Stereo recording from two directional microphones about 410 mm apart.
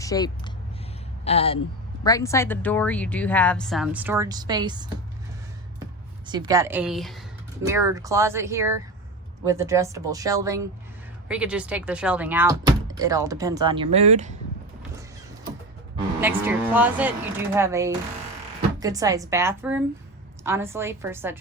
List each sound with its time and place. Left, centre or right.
0.0 s speech: centre
6.2 s a woman's voice: centre
16.2 s a woman's voice: centre